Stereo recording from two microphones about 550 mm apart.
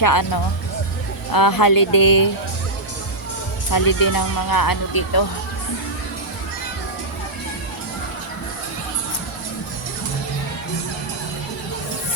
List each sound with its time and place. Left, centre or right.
0.0 s speech: left
1.3 s speech: left
3.7 s speech: left